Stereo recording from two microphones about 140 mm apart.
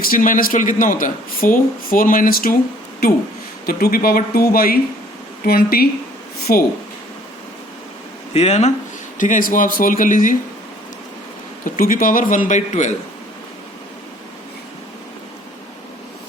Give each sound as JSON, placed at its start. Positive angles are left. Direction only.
{"t": 0.0, "sound": "speech", "side_deg": 85}
{"t": 3.7, "sound": "speech", "side_deg": 90}
{"t": 8.3, "sound": "speech", "side_deg": 50}
{"t": 9.1, "sound": "a man's voice", "side_deg": 70}
{"t": 11.6, "sound": "a man's voice", "side_deg": 75}
{"t": 12.5, "sound": "a man's voice", "side_deg": 60}